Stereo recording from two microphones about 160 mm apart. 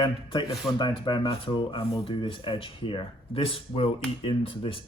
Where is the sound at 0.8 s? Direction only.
30° left (ahead or behind).